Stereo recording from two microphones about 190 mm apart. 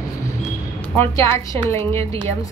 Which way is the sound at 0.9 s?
15° left (ahead or behind).